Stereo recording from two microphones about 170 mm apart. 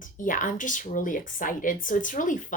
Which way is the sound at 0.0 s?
50° left (ahead or behind).